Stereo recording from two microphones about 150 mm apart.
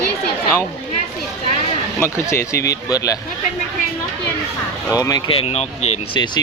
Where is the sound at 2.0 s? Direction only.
15° left (ahead or behind).